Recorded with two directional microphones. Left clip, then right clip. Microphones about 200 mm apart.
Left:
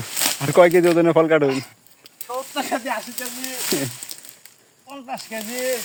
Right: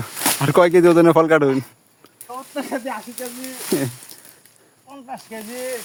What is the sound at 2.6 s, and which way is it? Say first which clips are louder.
Sizzle: left 1 dB; 30° left (ahead or behind).